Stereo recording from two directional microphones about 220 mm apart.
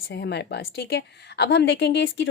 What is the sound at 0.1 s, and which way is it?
A woman's voice, 50° left (ahead or behind).